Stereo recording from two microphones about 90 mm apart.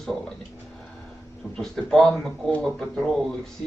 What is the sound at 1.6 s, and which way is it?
Speech, 5° left (ahead or behind).